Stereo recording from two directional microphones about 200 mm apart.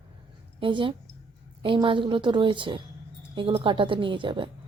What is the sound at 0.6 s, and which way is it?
A woman's voice, 25° right (ahead or behind).